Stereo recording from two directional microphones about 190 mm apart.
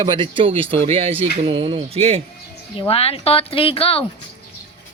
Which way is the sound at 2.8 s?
30° left (ahead or behind).